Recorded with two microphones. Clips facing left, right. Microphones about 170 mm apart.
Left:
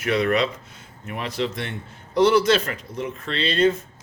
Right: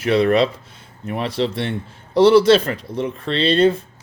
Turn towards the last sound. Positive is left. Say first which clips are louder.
# right 5 dB
turn(degrees=-30)  # may be behind; listen again after turning